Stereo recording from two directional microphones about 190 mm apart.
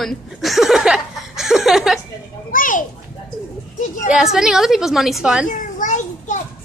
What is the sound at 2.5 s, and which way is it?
Speech, 45° left (ahead or behind).